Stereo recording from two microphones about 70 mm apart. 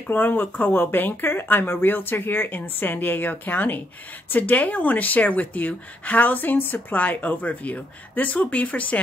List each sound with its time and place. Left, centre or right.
0.0 s speech: left